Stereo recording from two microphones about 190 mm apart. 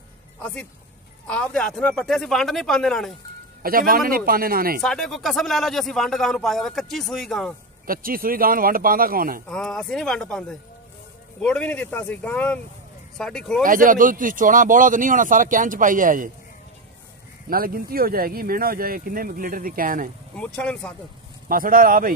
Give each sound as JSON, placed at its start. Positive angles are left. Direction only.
{"t": 1.2, "sound": "speech", "side_deg": 5}
{"t": 3.6, "sound": "speech", "side_deg": -50}
{"t": 4.8, "sound": "speech", "side_deg": 5}
{"t": 7.8, "sound": "speech", "side_deg": -50}
{"t": 9.5, "sound": "speech", "side_deg": 5}
{"t": 13.7, "sound": "speech", "side_deg": -45}
{"t": 17.5, "sound": "speech", "side_deg": -50}
{"t": 20.3, "sound": "speech", "side_deg": 5}
{"t": 21.5, "sound": "speech", "side_deg": -50}